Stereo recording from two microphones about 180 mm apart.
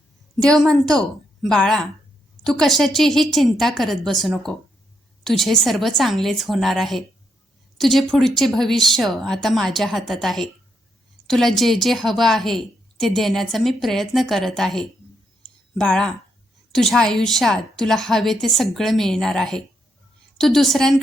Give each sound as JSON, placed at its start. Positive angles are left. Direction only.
{"t": 0.4, "sound": "a woman's voice", "side_deg": 5}